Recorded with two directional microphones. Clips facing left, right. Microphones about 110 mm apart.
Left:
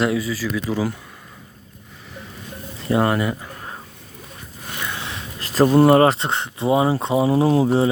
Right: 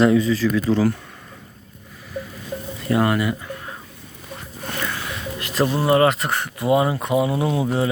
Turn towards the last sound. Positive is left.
turn(degrees=30)  # may be behind; listen again after turning